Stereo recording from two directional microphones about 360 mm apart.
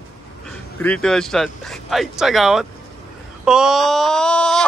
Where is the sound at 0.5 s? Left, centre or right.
Centre.